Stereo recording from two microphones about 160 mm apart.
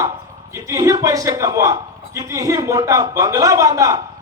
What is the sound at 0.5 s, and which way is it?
A man's voice, 20° right (ahead or behind).